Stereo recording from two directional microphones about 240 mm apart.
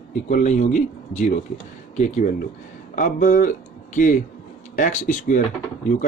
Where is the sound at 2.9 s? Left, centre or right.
Left.